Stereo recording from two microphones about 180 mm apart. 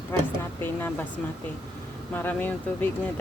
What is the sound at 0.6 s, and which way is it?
Speech, 10° left (ahead or behind).